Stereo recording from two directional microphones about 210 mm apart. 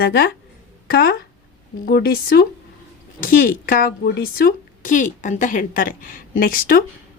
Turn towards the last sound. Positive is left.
turn(degrees=45)  # may be behind; listen again after turning